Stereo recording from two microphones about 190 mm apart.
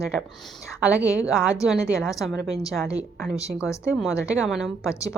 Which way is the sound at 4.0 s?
5° right (ahead or behind).